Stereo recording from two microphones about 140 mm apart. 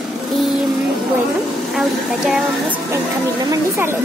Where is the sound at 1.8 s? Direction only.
Centre (ahead or behind).